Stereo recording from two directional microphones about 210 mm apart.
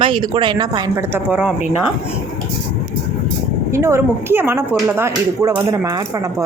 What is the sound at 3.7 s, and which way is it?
Speech, 10° right (ahead or behind).